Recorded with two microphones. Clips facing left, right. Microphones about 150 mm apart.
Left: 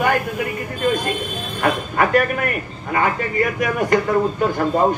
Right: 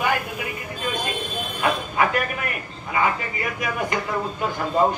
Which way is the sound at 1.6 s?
50° left (ahead or behind).